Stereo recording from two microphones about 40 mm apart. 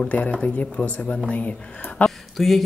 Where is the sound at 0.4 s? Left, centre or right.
Left.